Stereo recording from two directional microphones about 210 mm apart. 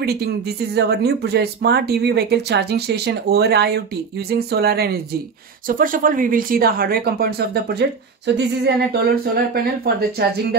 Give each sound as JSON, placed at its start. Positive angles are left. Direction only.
{"t": 0.0, "sound": "speech", "side_deg": -50}
{"t": 8.3, "sound": "a sound", "side_deg": -55}
{"t": 8.6, "sound": "speech", "side_deg": -45}